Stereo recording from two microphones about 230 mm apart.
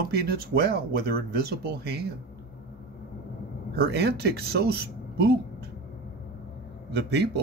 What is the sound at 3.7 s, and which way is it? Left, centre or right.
Speech, right.